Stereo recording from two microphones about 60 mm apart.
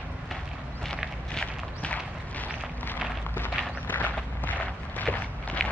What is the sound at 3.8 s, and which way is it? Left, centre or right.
Walk, left.